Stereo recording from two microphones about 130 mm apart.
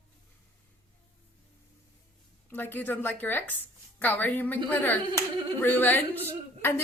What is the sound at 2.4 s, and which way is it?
A woman's voice, 15° left (ahead or behind).